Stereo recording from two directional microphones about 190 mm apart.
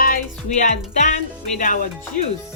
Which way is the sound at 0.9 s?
40° left (ahead or behind).